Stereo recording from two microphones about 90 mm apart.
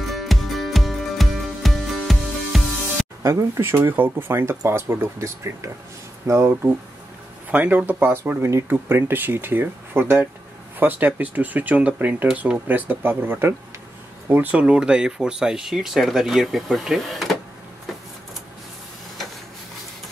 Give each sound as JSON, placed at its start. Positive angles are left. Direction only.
{"t": 0.0, "sound": "music", "side_deg": 0}
{"t": 3.2, "sound": "speech", "side_deg": -40}
{"t": 7.5, "sound": "speech", "side_deg": -20}